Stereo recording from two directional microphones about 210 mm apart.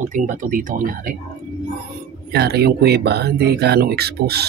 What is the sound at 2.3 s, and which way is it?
Speech, 50° right (ahead or behind).